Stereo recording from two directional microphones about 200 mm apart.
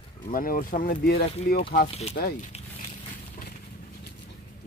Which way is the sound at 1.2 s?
30° left (ahead or behind).